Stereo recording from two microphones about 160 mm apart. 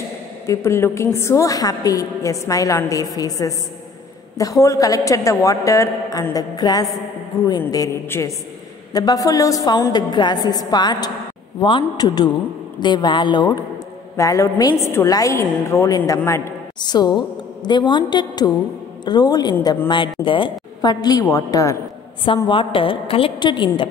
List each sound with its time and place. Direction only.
0.5 s a woman's voice: 15° left (ahead or behind)
22.2 s a woman's voice: 35° left (ahead or behind)